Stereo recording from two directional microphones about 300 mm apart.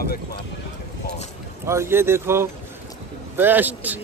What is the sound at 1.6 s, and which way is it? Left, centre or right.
A man's voice, centre.